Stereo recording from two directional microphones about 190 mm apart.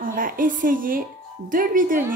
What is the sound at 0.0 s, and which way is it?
A woman's voice, 45° right (ahead or behind).